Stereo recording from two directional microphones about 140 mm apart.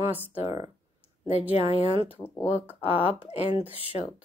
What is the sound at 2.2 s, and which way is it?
Speech, 15° left (ahead or behind).